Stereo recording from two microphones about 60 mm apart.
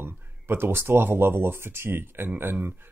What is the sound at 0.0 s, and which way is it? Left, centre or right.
Speech, right.